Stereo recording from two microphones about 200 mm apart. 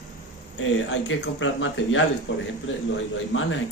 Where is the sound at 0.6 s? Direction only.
70° left (ahead or behind).